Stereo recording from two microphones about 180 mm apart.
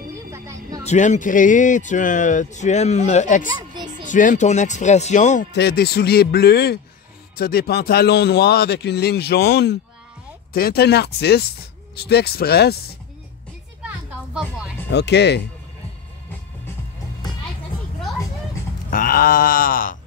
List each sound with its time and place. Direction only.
0.3 s a sound: 20° right (ahead or behind)
0.8 s speech: 40° left (ahead or behind)
3.4 s a sound: 25° right (ahead or behind)
4.1 s speech: 45° left (ahead or behind)
5.5 s a man's voice: 65° left (ahead or behind)
13.8 s music: 5° right (ahead or behind)
14.9 s speech: 70° left (ahead or behind)
18.9 s speech: 50° left (ahead or behind)